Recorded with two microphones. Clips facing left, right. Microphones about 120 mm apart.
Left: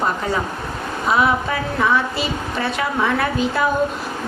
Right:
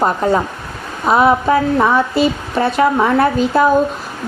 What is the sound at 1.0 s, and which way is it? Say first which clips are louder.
A woman's voice: right 6 dB; 45° right (ahead or behind).